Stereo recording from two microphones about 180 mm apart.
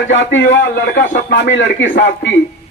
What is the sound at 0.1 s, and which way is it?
Speech, 85° left.